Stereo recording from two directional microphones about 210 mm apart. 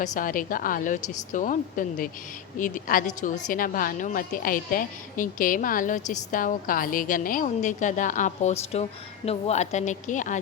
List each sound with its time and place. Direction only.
0.0 s a woman's voice: 40° left (ahead or behind)